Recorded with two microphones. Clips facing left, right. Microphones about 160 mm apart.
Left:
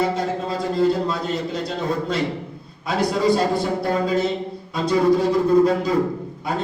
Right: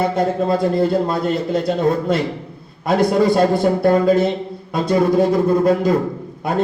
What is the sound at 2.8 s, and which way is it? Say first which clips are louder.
A man's voice: right 5 dB; 55° right (ahead or behind).